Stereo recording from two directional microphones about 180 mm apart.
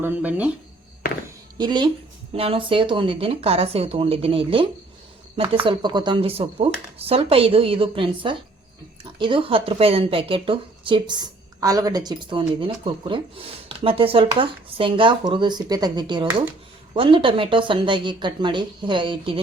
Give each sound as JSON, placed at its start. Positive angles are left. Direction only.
{"t": 0.0, "sound": "speech", "side_deg": -10}
{"t": 1.5, "sound": "a woman's voice", "side_deg": -25}
{"t": 5.6, "sound": "a woman's voice", "side_deg": -25}